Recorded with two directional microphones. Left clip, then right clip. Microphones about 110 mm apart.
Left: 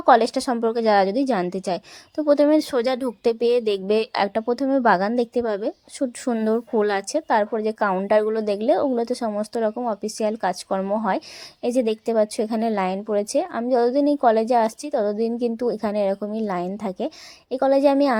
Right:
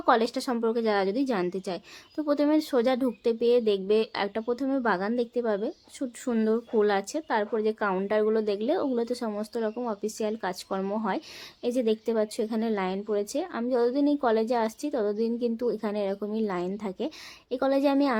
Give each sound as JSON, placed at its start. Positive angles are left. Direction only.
{"t": 0.0, "sound": "a woman's voice", "side_deg": 50}
{"t": 9.7, "sound": "a woman's voice", "side_deg": 40}
{"t": 11.6, "sound": "a woman's voice", "side_deg": 55}